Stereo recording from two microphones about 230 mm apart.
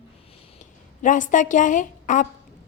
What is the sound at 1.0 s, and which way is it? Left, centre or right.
A woman's voice, left.